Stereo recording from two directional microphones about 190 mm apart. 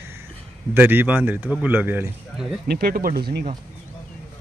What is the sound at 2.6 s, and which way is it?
Speech, 55° right (ahead or behind).